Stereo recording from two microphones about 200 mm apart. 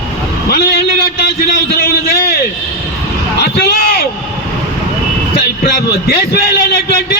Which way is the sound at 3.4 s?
50° left (ahead or behind).